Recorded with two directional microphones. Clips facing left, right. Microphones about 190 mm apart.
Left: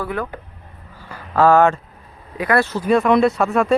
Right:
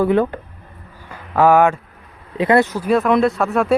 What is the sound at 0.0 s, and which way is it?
Speech, 25° right (ahead or behind).